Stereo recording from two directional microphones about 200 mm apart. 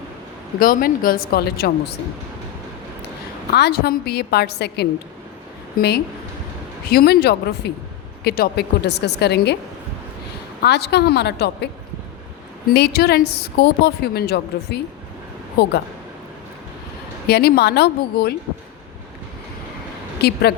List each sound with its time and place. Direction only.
0.6 s a woman's voice: 45° left (ahead or behind)
3.5 s a woman's voice: 55° left (ahead or behind)
6.9 s a woman's voice: 50° left (ahead or behind)
10.6 s a woman's voice: 55° left (ahead or behind)
12.7 s a woman's voice: 55° left (ahead or behind)
17.2 s a woman's voice: 55° left (ahead or behind)
20.1 s speech: 55° left (ahead or behind)